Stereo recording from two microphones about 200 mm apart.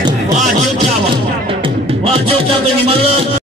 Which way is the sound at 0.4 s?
35° right (ahead or behind).